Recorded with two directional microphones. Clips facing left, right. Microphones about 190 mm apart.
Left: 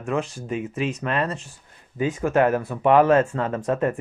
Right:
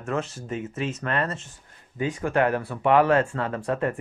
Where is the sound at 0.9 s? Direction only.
25° left (ahead or behind).